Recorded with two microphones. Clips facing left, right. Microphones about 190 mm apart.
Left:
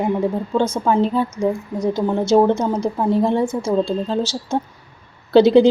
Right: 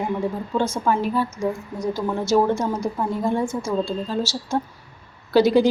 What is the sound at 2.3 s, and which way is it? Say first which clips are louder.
Speech: left 5 dB; 25° left (ahead or behind).